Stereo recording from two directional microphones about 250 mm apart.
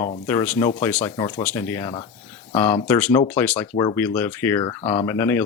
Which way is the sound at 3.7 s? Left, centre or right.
Centre.